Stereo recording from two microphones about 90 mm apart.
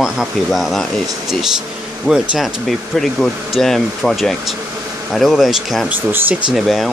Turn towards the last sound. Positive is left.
turn(degrees=0)  # may be behind; listen again after turning